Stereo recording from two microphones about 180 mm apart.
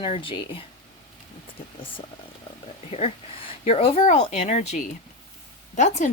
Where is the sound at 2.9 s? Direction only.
35° left (ahead or behind).